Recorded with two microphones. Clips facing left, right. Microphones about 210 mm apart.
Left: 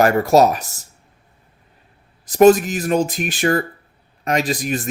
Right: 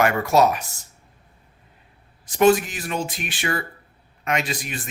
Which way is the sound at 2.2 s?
40° left (ahead or behind).